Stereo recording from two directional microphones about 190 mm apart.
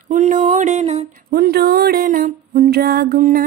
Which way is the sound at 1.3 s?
55° right (ahead or behind).